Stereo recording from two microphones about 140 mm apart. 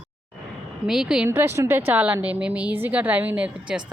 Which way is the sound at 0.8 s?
5° right (ahead or behind).